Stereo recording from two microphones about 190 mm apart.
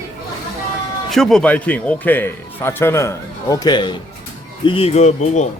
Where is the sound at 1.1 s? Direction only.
Centre (ahead or behind); by 5.5 s 40° left (ahead or behind).